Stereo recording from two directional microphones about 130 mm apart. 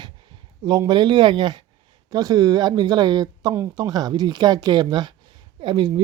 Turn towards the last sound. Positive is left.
turn(degrees=-40)  # may be behind; listen again after turning